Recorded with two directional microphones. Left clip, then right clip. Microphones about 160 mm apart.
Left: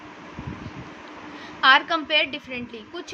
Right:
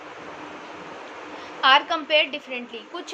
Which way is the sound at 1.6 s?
30° left (ahead or behind).